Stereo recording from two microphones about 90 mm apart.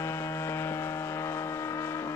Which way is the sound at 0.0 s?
30° left (ahead or behind).